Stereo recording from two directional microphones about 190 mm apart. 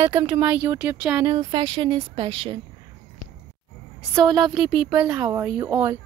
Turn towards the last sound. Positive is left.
turn(degrees=-10)  # may be behind; listen again after turning